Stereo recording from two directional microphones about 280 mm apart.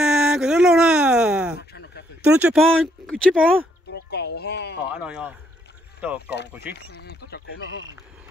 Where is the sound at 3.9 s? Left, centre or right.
Left.